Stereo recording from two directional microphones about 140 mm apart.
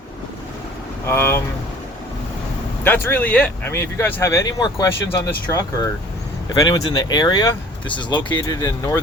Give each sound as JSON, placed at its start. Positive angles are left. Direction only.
{"t": 1.0, "sound": "speech", "side_deg": 15}
{"t": 2.8, "sound": "speech", "side_deg": 15}